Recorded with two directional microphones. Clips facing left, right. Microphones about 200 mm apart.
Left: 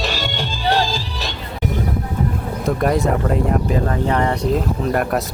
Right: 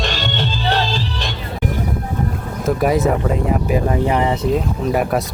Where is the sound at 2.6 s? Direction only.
5° right (ahead or behind).